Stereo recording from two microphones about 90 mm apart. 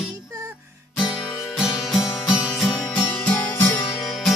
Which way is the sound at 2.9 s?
15° left (ahead or behind).